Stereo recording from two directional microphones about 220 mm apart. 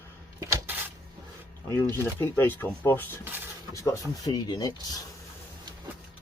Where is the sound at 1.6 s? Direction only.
10° left (ahead or behind).